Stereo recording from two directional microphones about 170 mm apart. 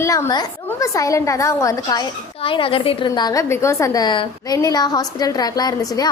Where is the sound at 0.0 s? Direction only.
20° left (ahead or behind).